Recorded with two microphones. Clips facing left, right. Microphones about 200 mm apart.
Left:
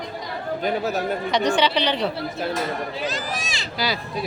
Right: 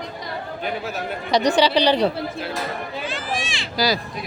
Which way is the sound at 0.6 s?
40° left (ahead or behind).